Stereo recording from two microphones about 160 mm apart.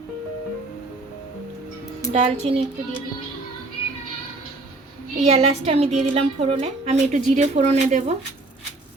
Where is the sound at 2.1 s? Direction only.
40° right (ahead or behind).